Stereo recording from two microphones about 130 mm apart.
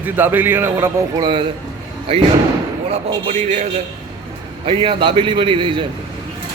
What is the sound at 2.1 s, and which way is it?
Speech, 45° right (ahead or behind).